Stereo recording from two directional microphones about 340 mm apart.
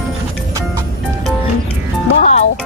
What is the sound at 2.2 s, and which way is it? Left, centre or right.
Music, left.